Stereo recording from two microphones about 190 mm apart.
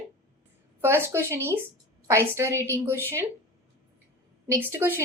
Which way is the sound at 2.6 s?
15° right (ahead or behind).